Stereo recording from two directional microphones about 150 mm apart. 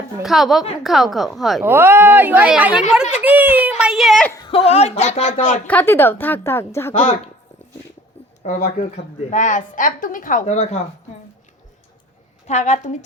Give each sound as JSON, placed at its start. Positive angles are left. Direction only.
{"t": 0.2, "sound": "a woman's voice", "side_deg": 0}
{"t": 1.6, "sound": "a child's voice", "side_deg": -15}
{"t": 4.4, "sound": "speech", "side_deg": 40}
{"t": 5.6, "sound": "a woman's voice", "side_deg": 10}
{"t": 6.9, "sound": "speech", "side_deg": 45}
{"t": 8.4, "sound": "a woman's voice", "side_deg": 60}
{"t": 10.4, "sound": "speech", "side_deg": 45}
{"t": 12.5, "sound": "speech", "side_deg": 50}